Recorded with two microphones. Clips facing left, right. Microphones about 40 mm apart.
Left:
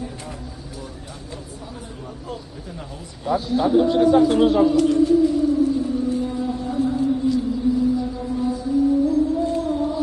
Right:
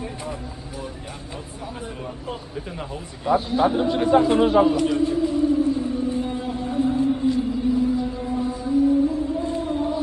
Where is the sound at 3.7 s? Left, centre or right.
Right.